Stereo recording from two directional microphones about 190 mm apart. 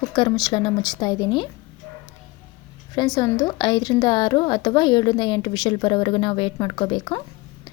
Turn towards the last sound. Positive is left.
turn(degrees=25)  # may be behind; listen again after turning